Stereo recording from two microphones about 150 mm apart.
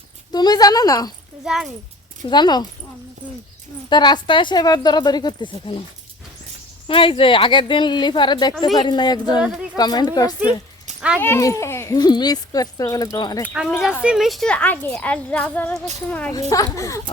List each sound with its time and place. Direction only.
0.3 s a child's voice: 25° left (ahead or behind)
1.5 s speech: centre (ahead or behind)
2.2 s a child's voice: 30° left (ahead or behind)
3.8 s a child's voice: 30° left (ahead or behind)
6.8 s a child's voice: 35° left (ahead or behind)
13.4 s a child's voice: 10° right (ahead or behind); by 16.3 s 10° left (ahead or behind)
16.5 s a child's voice: 20° left (ahead or behind)